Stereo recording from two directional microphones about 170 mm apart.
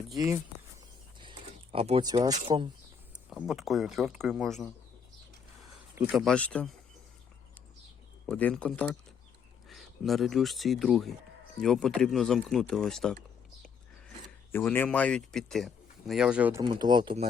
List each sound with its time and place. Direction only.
1.2 s a sound: 30° right (ahead or behind)
2.2 s speech: 25° right (ahead or behind)
3.2 s speech: 5° right (ahead or behind)
6.1 s speech: centre (ahead or behind)
8.3 s speech: 5° left (ahead or behind)
14.5 s speech: 10° left (ahead or behind); by 16.6 s 10° right (ahead or behind)
16.6 s speech: 25° right (ahead or behind)